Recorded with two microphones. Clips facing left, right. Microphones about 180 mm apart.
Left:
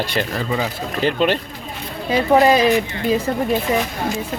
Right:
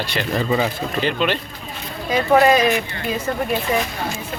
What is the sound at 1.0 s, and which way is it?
Speech, 40° left (ahead or behind).